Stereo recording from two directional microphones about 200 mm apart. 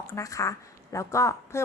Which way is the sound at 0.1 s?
15° left (ahead or behind).